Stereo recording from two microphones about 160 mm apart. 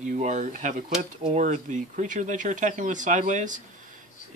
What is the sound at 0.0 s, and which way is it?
Speech, 50° right (ahead or behind).